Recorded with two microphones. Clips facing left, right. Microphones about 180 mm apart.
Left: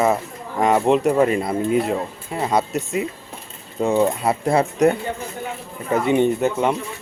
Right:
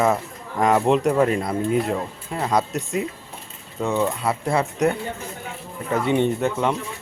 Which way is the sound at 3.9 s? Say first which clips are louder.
Left 4 dB; 25° left (ahead or behind).